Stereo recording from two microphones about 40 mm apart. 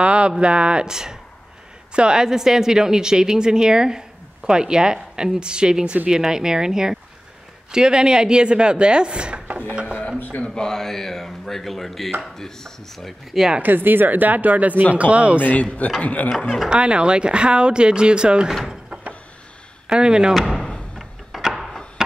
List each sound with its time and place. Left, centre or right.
0.0 s a woman's voice: right
9.5 s a sound: right
10.1 s speech: left
10.5 s speech: centre
13.6 s speech: right
15.6 s a man's voice: left
16.3 s speech: left
16.6 s speech: right
18.5 s a woman's voice: centre
19.9 s speech: right
21.5 s a sound: centre